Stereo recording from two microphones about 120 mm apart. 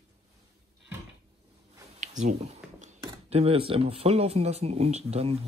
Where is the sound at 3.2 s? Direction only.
55° right (ahead or behind).